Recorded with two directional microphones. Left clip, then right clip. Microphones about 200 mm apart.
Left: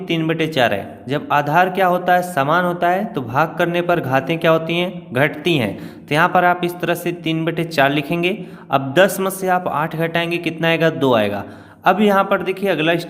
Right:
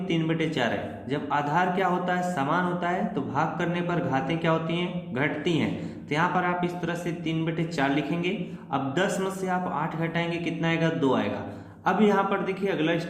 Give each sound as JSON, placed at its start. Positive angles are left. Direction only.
{"t": 0.1, "sound": "a man's voice", "side_deg": 50}